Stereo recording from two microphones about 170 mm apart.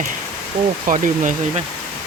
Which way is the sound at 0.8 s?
50° right (ahead or behind).